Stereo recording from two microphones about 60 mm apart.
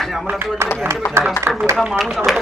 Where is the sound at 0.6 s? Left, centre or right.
Right.